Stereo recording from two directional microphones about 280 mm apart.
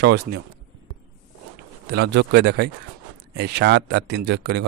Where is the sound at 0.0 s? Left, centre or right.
Right.